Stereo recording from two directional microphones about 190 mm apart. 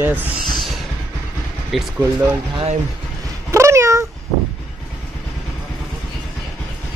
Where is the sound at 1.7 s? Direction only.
Centre (ahead or behind).